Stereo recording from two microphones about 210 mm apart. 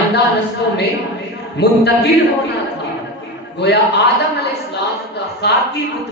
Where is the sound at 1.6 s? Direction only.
50° left (ahead or behind).